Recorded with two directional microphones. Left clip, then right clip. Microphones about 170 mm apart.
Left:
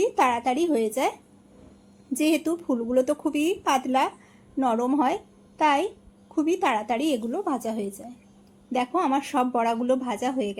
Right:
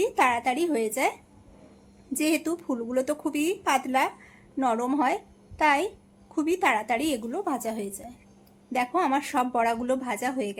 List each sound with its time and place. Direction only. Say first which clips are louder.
0.0 s a woman's voice: left 1 dB; 15° left (ahead or behind)
2.1 s a woman's voice: left 2 dB; 15° left (ahead or behind)